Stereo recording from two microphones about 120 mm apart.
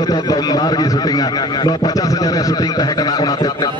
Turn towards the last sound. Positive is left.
turn(degrees=35)  # may be behind; listen again after turning